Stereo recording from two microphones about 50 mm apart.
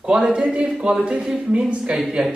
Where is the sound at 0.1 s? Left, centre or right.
Centre.